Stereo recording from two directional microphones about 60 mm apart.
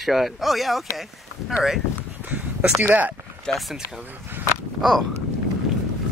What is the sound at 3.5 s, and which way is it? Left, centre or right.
Speech, centre.